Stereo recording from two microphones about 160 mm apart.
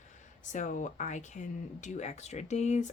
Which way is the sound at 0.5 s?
50° left (ahead or behind).